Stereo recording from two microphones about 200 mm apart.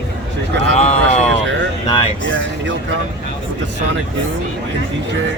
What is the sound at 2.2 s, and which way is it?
Speech, 65° right (ahead or behind).